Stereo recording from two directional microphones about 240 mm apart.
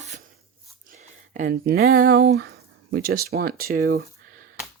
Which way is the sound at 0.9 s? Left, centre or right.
Right.